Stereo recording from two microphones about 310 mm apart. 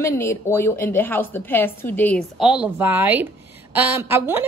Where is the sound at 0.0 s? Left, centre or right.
Centre.